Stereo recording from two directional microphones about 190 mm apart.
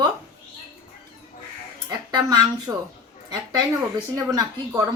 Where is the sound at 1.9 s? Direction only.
20° right (ahead or behind).